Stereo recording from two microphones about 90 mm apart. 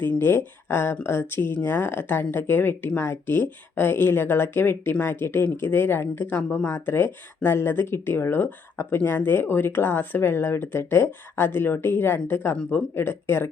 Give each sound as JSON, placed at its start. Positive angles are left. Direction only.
{"t": 0.2, "sound": "speech", "side_deg": 25}